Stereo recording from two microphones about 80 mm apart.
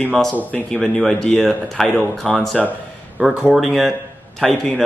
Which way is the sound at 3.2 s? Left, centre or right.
Centre.